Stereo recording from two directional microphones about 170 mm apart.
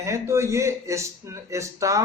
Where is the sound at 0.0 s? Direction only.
15° right (ahead or behind).